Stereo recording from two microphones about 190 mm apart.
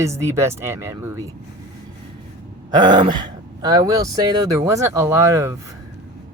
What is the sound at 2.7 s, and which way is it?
Speech, 25° right (ahead or behind).